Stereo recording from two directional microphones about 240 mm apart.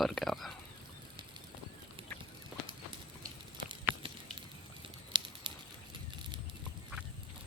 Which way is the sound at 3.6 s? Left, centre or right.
Centre.